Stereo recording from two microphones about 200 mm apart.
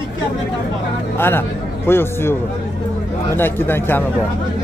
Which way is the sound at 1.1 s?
10° left (ahead or behind).